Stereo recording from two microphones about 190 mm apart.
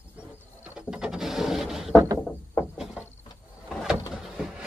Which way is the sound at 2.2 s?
15° left (ahead or behind).